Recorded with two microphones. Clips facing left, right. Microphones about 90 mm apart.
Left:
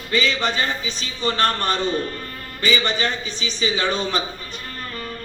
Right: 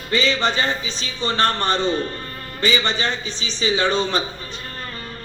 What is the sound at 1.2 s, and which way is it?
Speech, 25° right (ahead or behind).